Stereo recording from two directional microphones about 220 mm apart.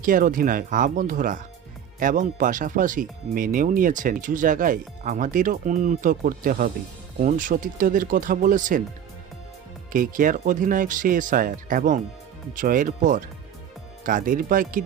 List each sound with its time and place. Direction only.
0.0 s speech: 40° right (ahead or behind)
9.9 s speech: 40° right (ahead or behind)